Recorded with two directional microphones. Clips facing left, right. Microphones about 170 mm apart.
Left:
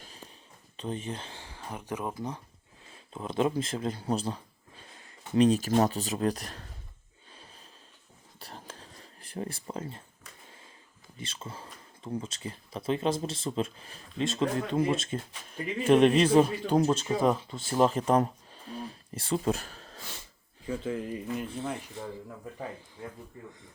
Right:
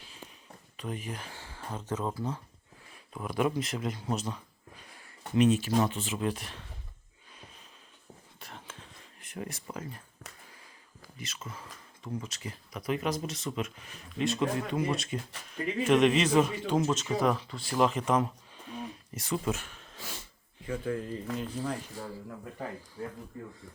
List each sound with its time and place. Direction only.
0.8 s speech: 30° left (ahead or behind)
8.4 s a sound: 35° left (ahead or behind)
11.2 s speech: 30° left (ahead or behind)
18.7 s a sound: 35° left (ahead or behind)
20.7 s speech: 20° left (ahead or behind)
21.7 s speech: 5° right (ahead or behind)